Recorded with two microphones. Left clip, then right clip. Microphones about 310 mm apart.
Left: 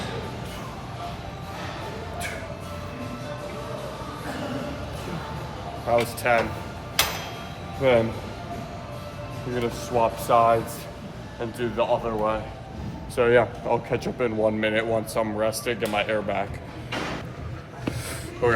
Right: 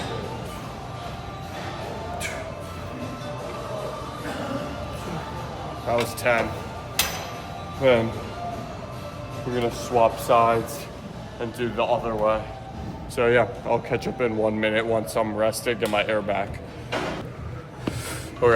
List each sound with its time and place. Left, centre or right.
5.9 s speech: centre
7.8 s speech: centre
9.6 s speech: centre
18.4 s speech: centre